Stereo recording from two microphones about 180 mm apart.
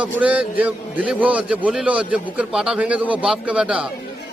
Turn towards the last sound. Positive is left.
turn(degrees=-5)  # may be behind; listen again after turning